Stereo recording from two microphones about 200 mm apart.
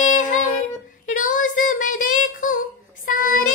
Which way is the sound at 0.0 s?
40° left (ahead or behind).